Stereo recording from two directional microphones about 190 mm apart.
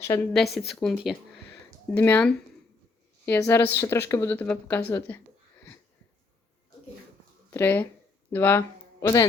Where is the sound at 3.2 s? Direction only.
10° left (ahead or behind).